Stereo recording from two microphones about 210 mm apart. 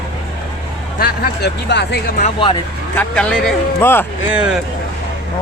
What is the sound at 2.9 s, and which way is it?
A man's voice, 5° left (ahead or behind).